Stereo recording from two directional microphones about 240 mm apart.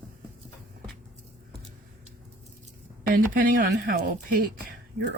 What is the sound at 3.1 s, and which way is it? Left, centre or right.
Speech, right.